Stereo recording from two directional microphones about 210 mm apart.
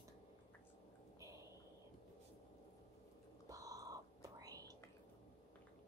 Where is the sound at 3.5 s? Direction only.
15° right (ahead or behind).